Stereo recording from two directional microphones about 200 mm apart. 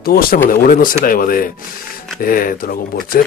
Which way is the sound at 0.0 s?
50° left (ahead or behind).